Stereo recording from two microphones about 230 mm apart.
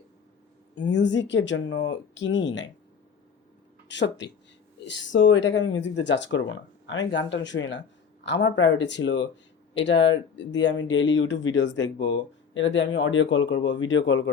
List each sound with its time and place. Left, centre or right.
0.8 s speech: left
3.8 s speech: left